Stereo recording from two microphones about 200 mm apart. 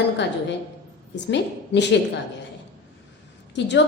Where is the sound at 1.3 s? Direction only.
60° left (ahead or behind).